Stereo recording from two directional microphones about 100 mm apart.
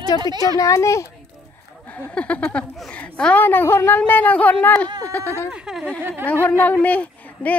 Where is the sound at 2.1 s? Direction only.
15° left (ahead or behind).